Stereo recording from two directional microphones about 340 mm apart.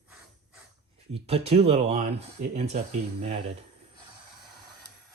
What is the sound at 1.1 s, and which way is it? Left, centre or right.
Speech, centre.